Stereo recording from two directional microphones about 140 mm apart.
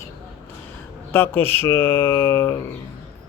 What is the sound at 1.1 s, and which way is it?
A man's voice, 15° left (ahead or behind).